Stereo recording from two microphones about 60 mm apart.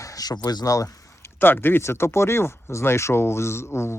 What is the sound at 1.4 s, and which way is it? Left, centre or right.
Speech, left.